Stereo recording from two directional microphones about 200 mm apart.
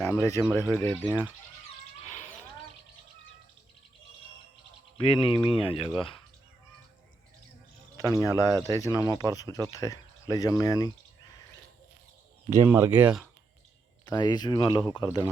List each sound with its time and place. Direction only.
0.0 s speech: 10° left (ahead or behind)
4.9 s speech: 25° left (ahead or behind)
8.0 s speech: 15° left (ahead or behind)
12.5 s speech: 15° right (ahead or behind)
14.0 s speech: 20° left (ahead or behind)